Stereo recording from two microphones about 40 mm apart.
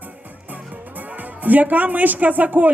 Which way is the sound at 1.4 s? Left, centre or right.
Right.